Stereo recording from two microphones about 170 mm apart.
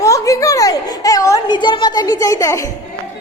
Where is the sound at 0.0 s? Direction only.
20° left (ahead or behind).